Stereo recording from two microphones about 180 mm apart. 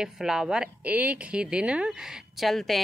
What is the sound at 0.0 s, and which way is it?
Speech, 5° right (ahead or behind).